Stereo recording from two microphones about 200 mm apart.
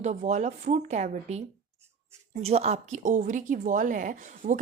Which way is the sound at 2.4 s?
30° right (ahead or behind).